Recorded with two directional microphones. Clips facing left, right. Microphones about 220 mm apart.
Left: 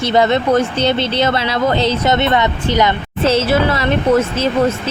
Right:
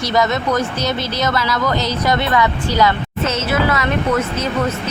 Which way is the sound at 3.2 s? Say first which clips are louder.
Left 5 dB; 30° left (ahead or behind).